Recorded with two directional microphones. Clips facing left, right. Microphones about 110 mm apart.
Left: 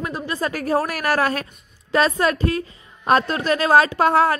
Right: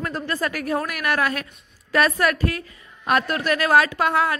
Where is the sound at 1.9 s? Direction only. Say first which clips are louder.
Left 1 dB; 25° left (ahead or behind).